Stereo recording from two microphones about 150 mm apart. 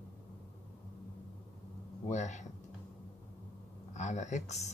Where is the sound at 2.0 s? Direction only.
50° left (ahead or behind).